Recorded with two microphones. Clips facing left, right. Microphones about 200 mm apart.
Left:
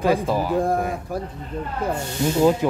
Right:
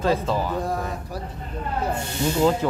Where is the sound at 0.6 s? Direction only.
50° left (ahead or behind).